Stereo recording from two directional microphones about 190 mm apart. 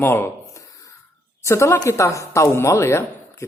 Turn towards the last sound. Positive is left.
turn(degrees=15)  # may be behind; listen again after turning